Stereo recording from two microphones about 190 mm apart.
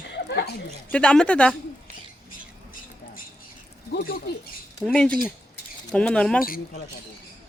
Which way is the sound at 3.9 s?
50° left (ahead or behind).